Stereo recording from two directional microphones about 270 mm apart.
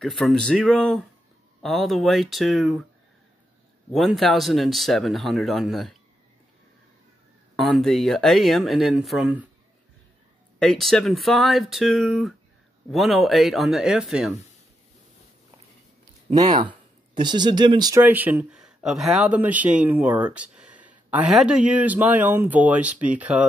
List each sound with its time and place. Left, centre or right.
0.0 s speech: centre
3.9 s speech: centre
7.5 s speech: centre
10.6 s speech: centre
16.3 s speech: centre